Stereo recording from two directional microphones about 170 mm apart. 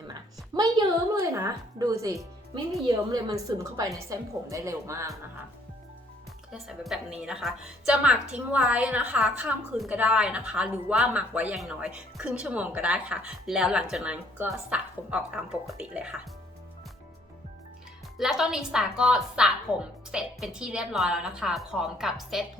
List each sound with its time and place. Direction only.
0.1 s a sound: 25° right (ahead or behind)
1.3 s a woman's voice: 15° right (ahead or behind)
6.5 s a woman's voice: centre (ahead or behind)
18.2 s a woman's voice: 5° right (ahead or behind)